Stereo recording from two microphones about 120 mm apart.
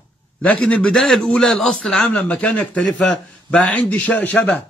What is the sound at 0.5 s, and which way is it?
A man's voice, 10° left (ahead or behind).